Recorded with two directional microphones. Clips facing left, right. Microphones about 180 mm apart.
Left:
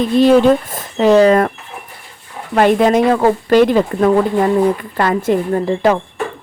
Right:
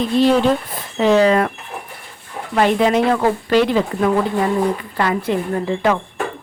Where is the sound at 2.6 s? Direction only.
50° left (ahead or behind).